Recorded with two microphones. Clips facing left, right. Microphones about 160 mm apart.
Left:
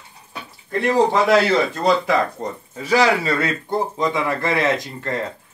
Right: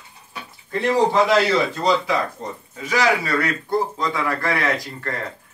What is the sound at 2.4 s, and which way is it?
Speech, 45° left (ahead or behind).